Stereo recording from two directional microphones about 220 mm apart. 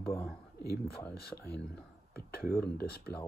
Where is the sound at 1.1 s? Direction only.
45° left (ahead or behind).